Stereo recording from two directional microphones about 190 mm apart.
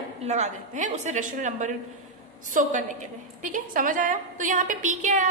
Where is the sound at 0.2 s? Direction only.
35° right (ahead or behind).